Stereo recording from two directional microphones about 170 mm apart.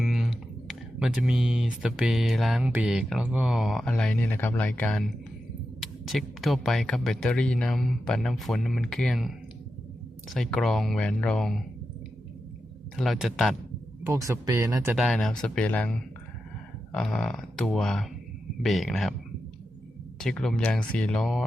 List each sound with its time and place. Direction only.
0.0 s speech: centre (ahead or behind)
13.0 s speech: centre (ahead or behind)
14.0 s speech: 20° right (ahead or behind)
14.9 s speech: centre (ahead or behind)
20.1 s speech: 5° left (ahead or behind)